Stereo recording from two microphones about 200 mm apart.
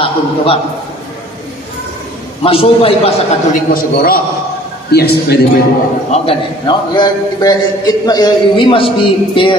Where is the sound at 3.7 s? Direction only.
45° left (ahead or behind).